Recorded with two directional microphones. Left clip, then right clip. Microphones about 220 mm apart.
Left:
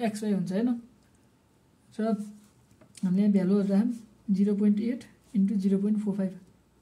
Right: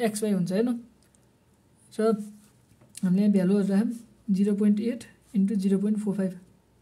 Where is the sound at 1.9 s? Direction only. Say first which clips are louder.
Right 6 dB; 40° right (ahead or behind).